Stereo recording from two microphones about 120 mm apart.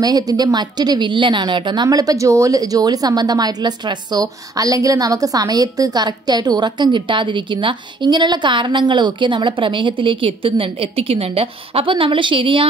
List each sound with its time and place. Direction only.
0.0 s a woman's voice: 35° right (ahead or behind)